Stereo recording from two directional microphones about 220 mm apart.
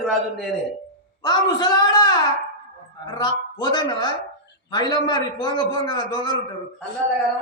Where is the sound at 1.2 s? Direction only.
20° left (ahead or behind).